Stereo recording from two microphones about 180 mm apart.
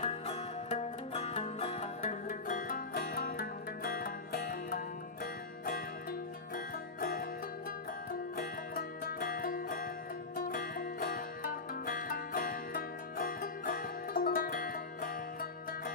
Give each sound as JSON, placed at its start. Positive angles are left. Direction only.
{"t": 0.0, "sound": "music", "side_deg": 35}
{"t": 2.0, "sound": "music", "side_deg": 50}
{"t": 8.4, "sound": "music", "side_deg": 50}